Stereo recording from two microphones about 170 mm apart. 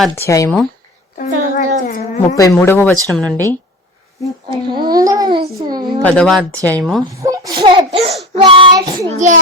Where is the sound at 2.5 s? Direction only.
10° left (ahead or behind).